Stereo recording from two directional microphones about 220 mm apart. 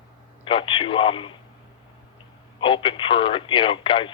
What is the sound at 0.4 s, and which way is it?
Speech, 25° left (ahead or behind).